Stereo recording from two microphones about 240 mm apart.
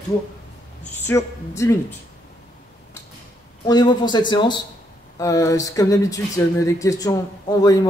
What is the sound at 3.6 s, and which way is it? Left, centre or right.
Speech, centre.